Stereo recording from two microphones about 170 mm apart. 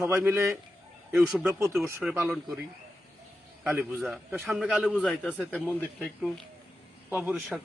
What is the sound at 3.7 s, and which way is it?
Speech, 15° right (ahead or behind).